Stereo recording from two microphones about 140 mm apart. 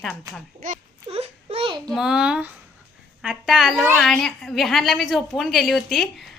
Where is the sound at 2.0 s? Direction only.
5° right (ahead or behind).